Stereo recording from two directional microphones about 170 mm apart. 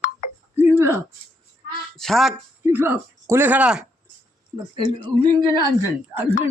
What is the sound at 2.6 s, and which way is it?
Speech, 15° right (ahead or behind).